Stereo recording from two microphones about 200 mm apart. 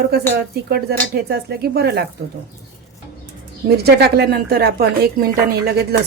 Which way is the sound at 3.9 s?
55° right (ahead or behind).